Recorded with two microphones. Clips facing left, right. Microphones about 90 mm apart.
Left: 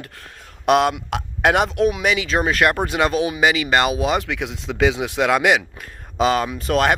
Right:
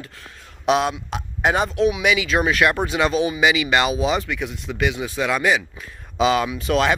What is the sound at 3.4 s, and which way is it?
Speech, 45° left (ahead or behind).